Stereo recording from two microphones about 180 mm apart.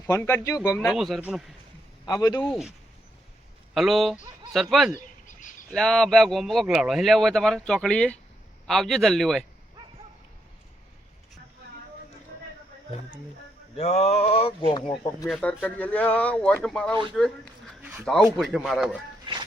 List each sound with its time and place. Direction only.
0.0 s speech: 15° left (ahead or behind)
0.8 s speech: centre (ahead or behind)
2.0 s speech: 20° left (ahead or behind)
2.4 s speech: centre (ahead or behind)
3.8 s speech: centre (ahead or behind)
4.9 s bird: 45° left (ahead or behind)
5.7 s speech: 5° left (ahead or behind)
13.7 s speech: 35° left (ahead or behind)
15.3 s speech: 5° left (ahead or behind)
19.2 s a sound: 25° right (ahead or behind)